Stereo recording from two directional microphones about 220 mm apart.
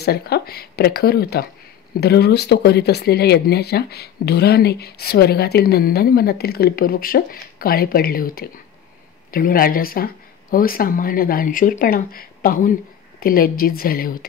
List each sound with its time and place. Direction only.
0.0 s speech: 45° left (ahead or behind)